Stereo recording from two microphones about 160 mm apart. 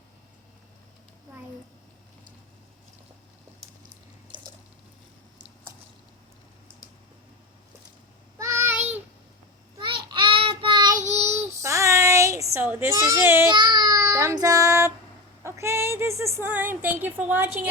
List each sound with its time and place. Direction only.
4.3 s water: 30° right (ahead or behind)
8.4 s child singing: 20° right (ahead or behind)
9.7 s child singing: 30° right (ahead or behind)
11.1 s child singing: 15° right (ahead or behind)
13.5 s child singing: 25° right (ahead or behind)
15.4 s a sound: 15° right (ahead or behind)